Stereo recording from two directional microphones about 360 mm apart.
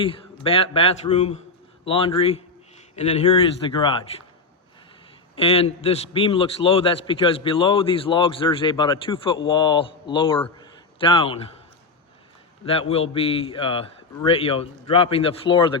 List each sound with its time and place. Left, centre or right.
0.0 s a man's voice: centre
5.4 s a man's voice: centre
12.9 s a man's voice: centre